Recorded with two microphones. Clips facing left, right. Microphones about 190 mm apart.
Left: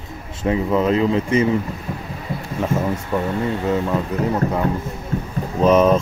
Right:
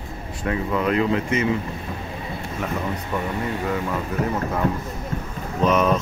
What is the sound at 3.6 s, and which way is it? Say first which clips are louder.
Speech: left 6 dB; 20° left (ahead or behind).